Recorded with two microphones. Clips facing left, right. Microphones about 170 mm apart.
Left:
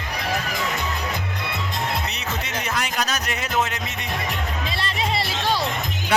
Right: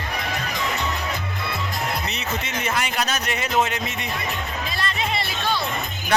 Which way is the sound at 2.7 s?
Centre (ahead or behind).